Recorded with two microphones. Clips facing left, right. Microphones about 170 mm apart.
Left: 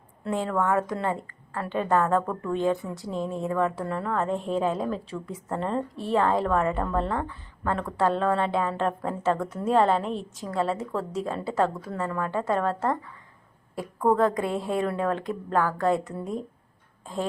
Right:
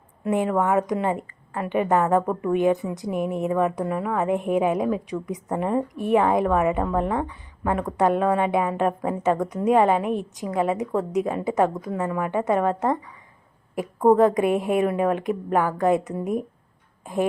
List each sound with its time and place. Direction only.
0.3 s a woman's voice: 15° right (ahead or behind)